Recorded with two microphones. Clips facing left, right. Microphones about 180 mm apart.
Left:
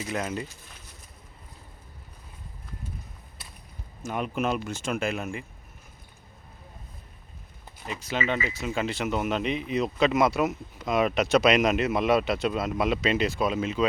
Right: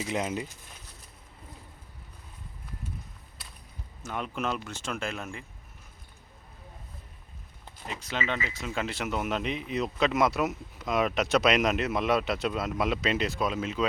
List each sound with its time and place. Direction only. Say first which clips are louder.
0.1 s speech: even; 15° right (ahead or behind)
4.0 s speech: left 4 dB; 15° left (ahead or behind)
7.9 s speech: left 4 dB; 5° left (ahead or behind)